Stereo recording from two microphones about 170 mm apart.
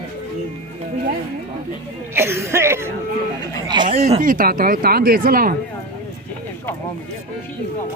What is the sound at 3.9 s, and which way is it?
Speech, 40° right (ahead or behind).